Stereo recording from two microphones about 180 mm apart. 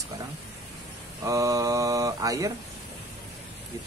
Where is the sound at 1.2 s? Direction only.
20° right (ahead or behind).